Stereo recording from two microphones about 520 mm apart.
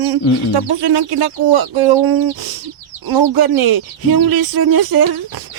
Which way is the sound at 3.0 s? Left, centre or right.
Right.